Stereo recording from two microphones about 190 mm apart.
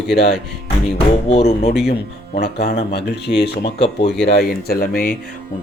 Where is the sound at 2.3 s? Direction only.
60° left (ahead or behind).